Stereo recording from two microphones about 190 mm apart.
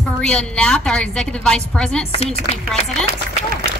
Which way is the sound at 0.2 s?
5° left (ahead or behind).